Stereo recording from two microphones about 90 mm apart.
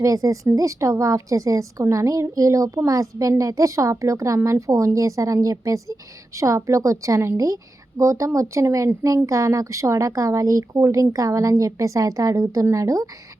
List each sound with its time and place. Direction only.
0.0 s a woman's voice: 40° right (ahead or behind)